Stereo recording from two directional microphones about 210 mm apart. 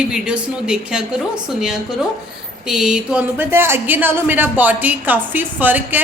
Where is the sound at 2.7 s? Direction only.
Centre (ahead or behind).